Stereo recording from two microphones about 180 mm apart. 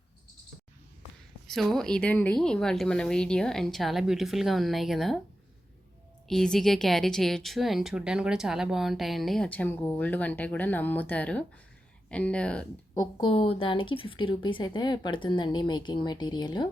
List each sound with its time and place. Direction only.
1.5 s speech: centre (ahead or behind)
6.2 s speech: centre (ahead or behind)
12.9 s a woman's voice: 20° left (ahead or behind)